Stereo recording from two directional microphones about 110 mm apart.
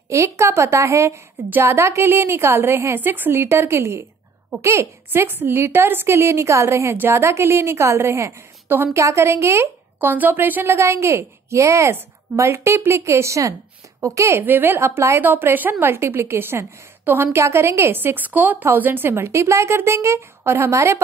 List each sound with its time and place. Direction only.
0.1 s a woman's voice: 25° right (ahead or behind)